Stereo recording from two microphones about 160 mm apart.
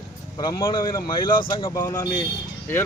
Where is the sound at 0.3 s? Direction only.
25° left (ahead or behind).